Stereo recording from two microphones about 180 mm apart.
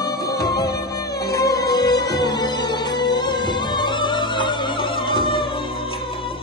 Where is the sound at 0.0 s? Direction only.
20° left (ahead or behind).